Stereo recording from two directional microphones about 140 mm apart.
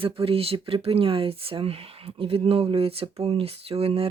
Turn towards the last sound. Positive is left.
turn(degrees=-45)  # may be behind; listen again after turning